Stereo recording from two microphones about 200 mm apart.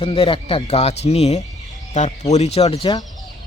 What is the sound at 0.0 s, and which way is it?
Speech, 30° left (ahead or behind).